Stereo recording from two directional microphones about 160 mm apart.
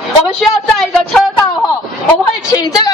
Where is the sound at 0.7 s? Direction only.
5° left (ahead or behind).